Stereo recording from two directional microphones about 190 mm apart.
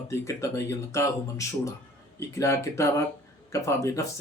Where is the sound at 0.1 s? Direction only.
15° left (ahead or behind).